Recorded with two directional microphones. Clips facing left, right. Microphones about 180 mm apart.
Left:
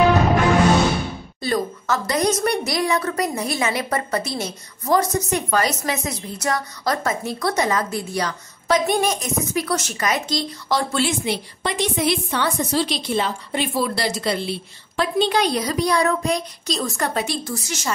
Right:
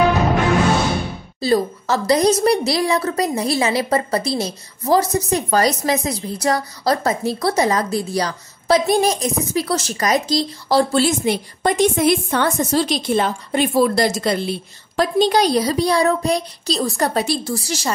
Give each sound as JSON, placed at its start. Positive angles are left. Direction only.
{"t": 1.4, "sound": "a woman's voice", "side_deg": -30}